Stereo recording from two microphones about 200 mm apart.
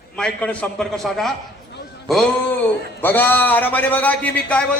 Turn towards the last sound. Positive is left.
turn(degrees=5)  # may be behind; listen again after turning